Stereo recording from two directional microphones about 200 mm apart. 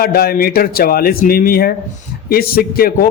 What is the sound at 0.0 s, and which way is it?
A man's voice, 50° left (ahead or behind).